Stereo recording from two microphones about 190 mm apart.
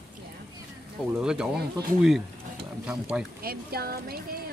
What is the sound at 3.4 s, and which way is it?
Speech, 55° right (ahead or behind).